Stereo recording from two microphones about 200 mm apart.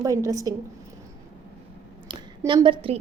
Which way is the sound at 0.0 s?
15° right (ahead or behind).